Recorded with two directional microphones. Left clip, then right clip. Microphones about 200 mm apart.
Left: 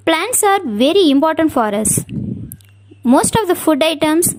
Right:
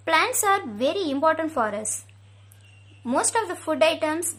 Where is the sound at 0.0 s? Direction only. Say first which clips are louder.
Left 7 dB; 40° left (ahead or behind).